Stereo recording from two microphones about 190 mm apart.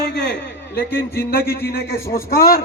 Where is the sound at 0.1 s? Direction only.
60° left (ahead or behind).